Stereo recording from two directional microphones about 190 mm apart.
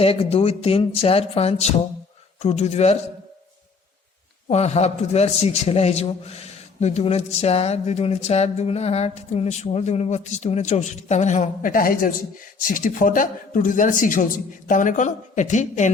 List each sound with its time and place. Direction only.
0.0 s a man's voice: 30° left (ahead or behind)
4.4 s a man's voice: 35° left (ahead or behind)